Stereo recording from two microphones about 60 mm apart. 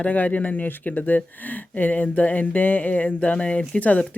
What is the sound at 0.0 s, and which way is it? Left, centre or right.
Speech, left.